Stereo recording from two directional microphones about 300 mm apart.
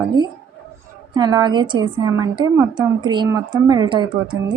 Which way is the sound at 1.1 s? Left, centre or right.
Centre.